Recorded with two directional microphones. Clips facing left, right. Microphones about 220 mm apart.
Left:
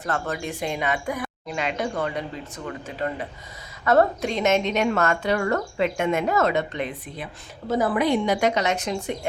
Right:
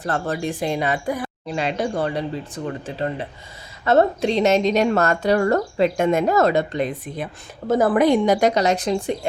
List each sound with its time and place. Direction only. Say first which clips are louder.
0.0 s a woman's voice: right 4 dB; 35° right (ahead or behind)
7.7 s a woman's voice: right 5 dB; 50° right (ahead or behind)